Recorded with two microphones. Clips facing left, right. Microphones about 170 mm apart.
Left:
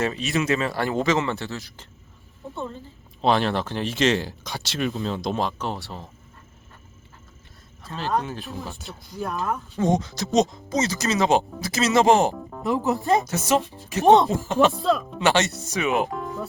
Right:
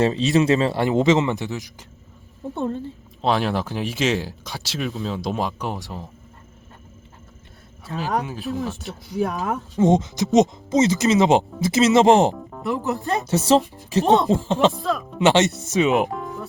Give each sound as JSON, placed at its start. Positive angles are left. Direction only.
{"t": 0.0, "sound": "speech", "side_deg": -30}
{"t": 3.2, "sound": "speech", "side_deg": 0}
{"t": 8.2, "sound": "speech", "side_deg": -5}
{"t": 9.0, "sound": "speech", "side_deg": -70}
{"t": 9.7, "sound": "speech", "side_deg": -20}
{"t": 12.4, "sound": "music", "side_deg": 0}
{"t": 12.6, "sound": "speech", "side_deg": 20}
{"t": 13.2, "sound": "speech", "side_deg": -30}
{"t": 14.7, "sound": "speech", "side_deg": 0}
{"t": 15.2, "sound": "speech", "side_deg": -20}
{"t": 16.1, "sound": "music", "side_deg": 0}